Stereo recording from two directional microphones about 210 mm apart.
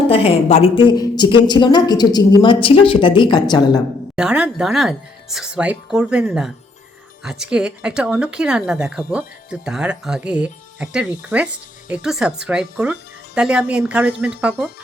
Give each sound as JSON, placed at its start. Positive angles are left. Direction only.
{"t": 0.1, "sound": "a woman's voice", "side_deg": 30}
{"t": 4.1, "sound": "speech", "side_deg": -5}